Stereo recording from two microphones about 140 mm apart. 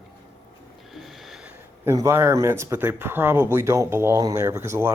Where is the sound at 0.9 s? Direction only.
Centre (ahead or behind).